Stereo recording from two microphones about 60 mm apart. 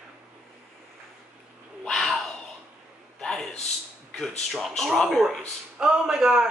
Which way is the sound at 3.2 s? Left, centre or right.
Centre.